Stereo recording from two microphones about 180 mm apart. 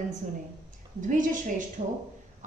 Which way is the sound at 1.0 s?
45° right (ahead or behind).